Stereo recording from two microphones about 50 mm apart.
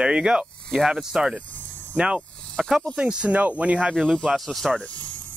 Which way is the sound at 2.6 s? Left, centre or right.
Centre.